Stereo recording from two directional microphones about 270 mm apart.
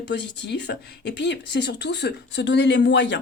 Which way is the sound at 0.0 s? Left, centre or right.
Left.